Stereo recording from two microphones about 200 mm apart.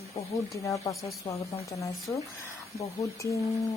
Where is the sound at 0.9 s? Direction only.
Centre (ahead or behind).